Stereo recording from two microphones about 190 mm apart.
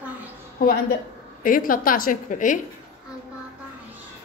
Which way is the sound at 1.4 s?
45° left (ahead or behind).